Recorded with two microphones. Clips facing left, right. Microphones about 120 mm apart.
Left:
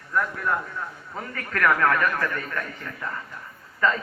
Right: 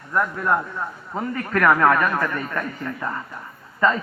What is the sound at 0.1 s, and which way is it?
Speech, 40° right (ahead or behind).